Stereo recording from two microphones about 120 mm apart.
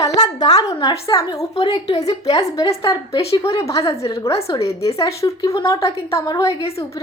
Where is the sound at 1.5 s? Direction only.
50° left (ahead or behind).